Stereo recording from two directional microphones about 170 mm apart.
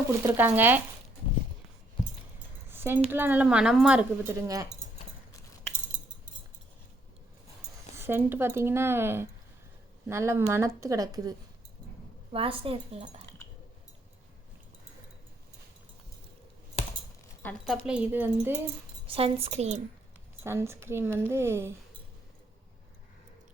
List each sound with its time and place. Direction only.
0.2 s a woman's voice: 10° right (ahead or behind)
2.6 s keys jangling: 15° right (ahead or behind)
3.1 s a woman's voice: 10° right (ahead or behind)
7.9 s a woman's voice: 15° right (ahead or behind)
12.3 s a woman's voice: 30° right (ahead or behind)
17.7 s a woman's voice: 5° right (ahead or behind)
19.0 s a woman's voice: 35° right (ahead or behind)
20.4 s a woman's voice: 15° right (ahead or behind)